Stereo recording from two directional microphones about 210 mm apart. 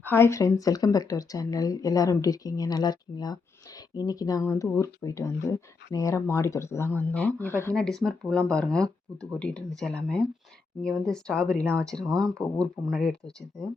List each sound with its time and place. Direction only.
0.0 s speech: 10° left (ahead or behind)